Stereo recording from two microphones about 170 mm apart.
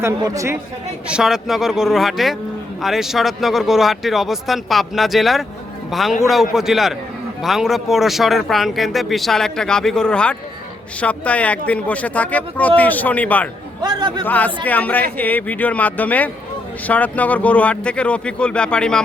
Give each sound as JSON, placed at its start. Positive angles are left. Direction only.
{"t": 0.0, "sound": "speech", "side_deg": -20}
{"t": 1.0, "sound": "speech", "side_deg": -5}
{"t": 13.8, "sound": "a man's voice", "side_deg": -25}
{"t": 14.3, "sound": "speech", "side_deg": 10}